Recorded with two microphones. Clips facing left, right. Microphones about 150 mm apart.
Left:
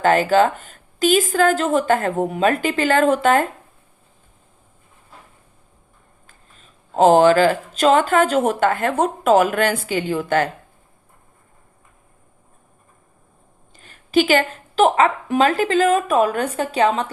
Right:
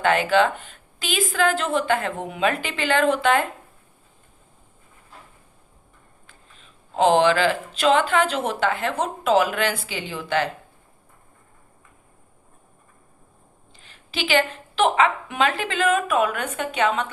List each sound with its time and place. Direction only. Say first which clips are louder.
0.0 s a woman's voice: left 4 dB; 40° left (ahead or behind)
6.2 s speech: left 1 dB; 45° left (ahead or behind)
13.7 s a woman's voice: left 14 dB; 45° left (ahead or behind)